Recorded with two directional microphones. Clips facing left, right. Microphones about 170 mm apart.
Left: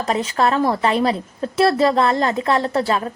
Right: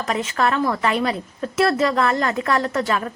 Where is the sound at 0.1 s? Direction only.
30° left (ahead or behind).